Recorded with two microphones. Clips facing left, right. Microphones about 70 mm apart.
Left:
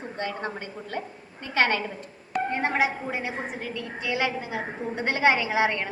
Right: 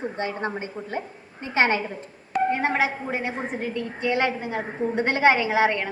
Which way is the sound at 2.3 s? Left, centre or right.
Centre.